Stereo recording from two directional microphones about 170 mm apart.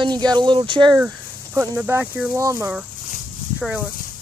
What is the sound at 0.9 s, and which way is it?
Speech, 15° right (ahead or behind).